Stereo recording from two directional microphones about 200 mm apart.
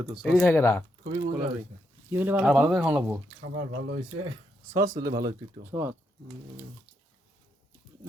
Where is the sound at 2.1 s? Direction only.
10° right (ahead or behind).